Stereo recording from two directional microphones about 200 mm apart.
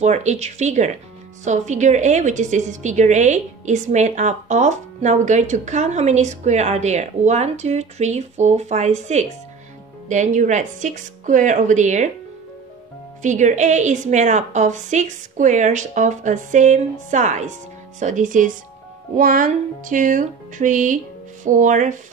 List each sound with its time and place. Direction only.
0.0 s a woman's voice: 35° right (ahead or behind)
13.2 s a woman's voice: 35° right (ahead or behind)